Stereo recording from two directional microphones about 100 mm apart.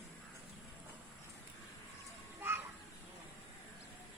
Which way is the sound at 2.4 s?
20° right (ahead or behind).